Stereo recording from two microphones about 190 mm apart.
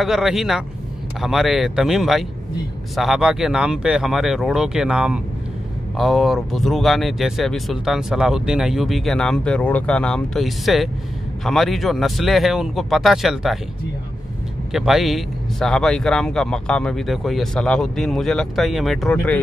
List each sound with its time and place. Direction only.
0.0 s speech: centre (ahead or behind)
14.7 s speech: centre (ahead or behind)